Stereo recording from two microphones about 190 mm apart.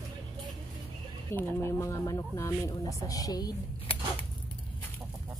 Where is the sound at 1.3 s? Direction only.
10° left (ahead or behind).